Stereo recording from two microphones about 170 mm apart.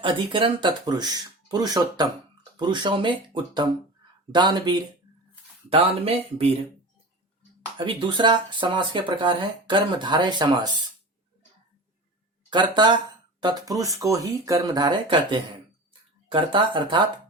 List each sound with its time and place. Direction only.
0.0 s speech: 30° right (ahead or behind)
5.7 s speech: 35° right (ahead or behind)
7.8 s speech: 30° right (ahead or behind)
12.5 s speech: 25° right (ahead or behind)